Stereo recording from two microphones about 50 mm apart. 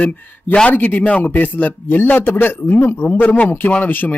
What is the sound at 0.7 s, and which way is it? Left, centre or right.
Speech, left.